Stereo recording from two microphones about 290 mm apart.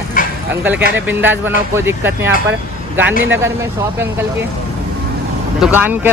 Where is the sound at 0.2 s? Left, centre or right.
Left.